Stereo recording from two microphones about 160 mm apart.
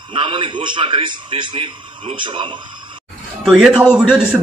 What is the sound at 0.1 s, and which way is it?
A man's voice, 30° right (ahead or behind).